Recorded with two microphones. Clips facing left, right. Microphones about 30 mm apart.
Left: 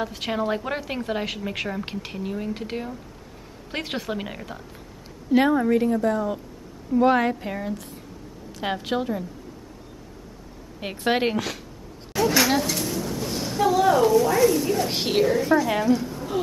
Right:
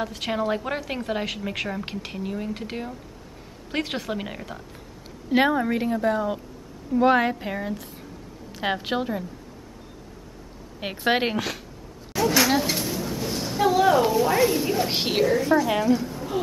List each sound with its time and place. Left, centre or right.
0.0 s a woman's voice: centre
5.3 s a woman's voice: centre
10.8 s a woman's voice: centre
12.1 s a sound: centre
14.0 s a woman's voice: right; by 16.3 s centre